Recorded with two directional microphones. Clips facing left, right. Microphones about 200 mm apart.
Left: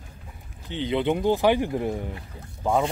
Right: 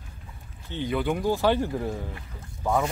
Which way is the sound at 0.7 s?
20° left (ahead or behind).